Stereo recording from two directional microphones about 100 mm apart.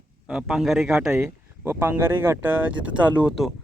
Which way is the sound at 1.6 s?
25° right (ahead or behind).